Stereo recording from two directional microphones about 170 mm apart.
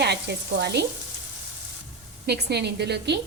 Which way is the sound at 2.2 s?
75° right (ahead or behind).